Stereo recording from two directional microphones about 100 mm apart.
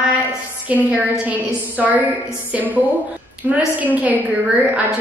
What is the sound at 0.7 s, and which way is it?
A woman's voice, 15° right (ahead or behind).